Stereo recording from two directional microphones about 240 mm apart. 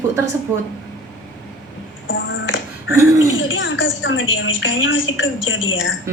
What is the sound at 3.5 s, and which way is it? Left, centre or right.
A woman's voice, left.